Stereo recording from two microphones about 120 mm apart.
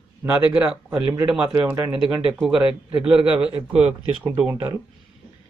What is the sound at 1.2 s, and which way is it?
Speech, 10° right (ahead or behind).